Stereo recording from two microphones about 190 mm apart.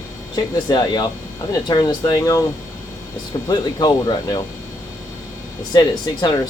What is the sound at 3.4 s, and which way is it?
Speech, 20° left (ahead or behind).